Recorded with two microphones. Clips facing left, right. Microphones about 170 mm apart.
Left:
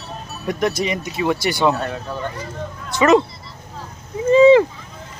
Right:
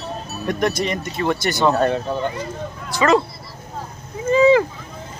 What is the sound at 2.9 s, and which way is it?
Speech, 20° left (ahead or behind).